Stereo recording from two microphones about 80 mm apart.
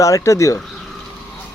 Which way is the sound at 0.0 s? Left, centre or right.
Left.